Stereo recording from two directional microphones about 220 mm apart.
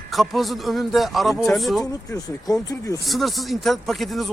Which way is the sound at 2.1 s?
15° left (ahead or behind).